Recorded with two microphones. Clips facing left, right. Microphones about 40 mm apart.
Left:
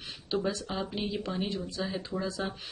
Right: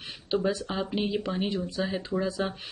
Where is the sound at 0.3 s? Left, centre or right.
Centre.